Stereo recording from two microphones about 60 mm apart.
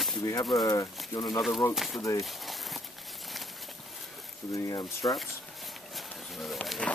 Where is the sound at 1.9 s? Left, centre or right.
Left.